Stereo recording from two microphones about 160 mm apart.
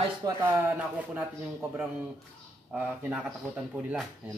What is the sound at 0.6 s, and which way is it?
Speech, 10° right (ahead or behind).